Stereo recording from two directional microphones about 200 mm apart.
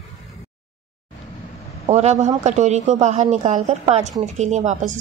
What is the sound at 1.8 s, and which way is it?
A woman's voice, 35° right (ahead or behind).